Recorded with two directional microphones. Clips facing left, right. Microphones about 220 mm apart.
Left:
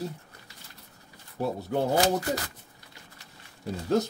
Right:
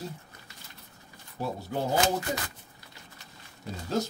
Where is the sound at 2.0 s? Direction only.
40° left (ahead or behind).